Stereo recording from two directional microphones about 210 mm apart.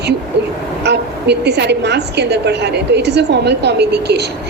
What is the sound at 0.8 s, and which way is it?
A woman's voice, 55° right (ahead or behind).